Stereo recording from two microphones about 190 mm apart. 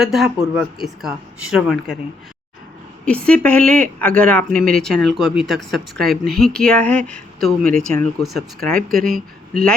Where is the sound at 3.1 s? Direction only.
5° left (ahead or behind).